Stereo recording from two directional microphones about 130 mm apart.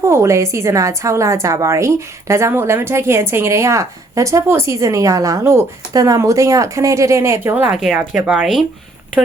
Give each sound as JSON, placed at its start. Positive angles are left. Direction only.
{"t": 0.0, "sound": "a woman's voice", "side_deg": -20}